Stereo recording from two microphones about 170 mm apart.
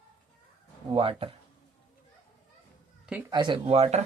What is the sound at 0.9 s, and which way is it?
Speech, 35° right (ahead or behind).